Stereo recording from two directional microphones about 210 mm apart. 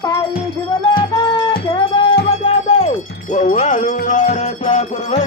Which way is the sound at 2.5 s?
30° left (ahead or behind).